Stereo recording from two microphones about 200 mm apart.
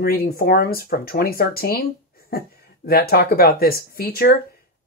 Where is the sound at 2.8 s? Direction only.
50° left (ahead or behind).